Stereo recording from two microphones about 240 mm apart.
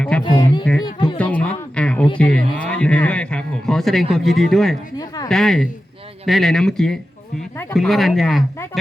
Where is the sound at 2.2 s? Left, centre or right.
Centre.